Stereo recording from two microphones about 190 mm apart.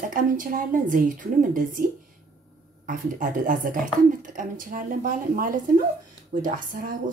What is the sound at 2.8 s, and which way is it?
A woman's voice, 45° right (ahead or behind).